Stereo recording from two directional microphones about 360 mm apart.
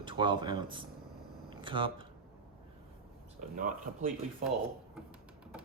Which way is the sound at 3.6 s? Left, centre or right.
Right.